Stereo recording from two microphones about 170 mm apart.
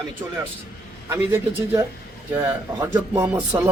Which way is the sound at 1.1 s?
15° right (ahead or behind).